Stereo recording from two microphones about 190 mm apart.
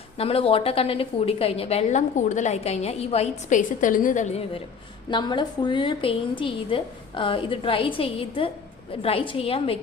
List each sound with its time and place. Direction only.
0.2 s a woman's voice: 30° left (ahead or behind)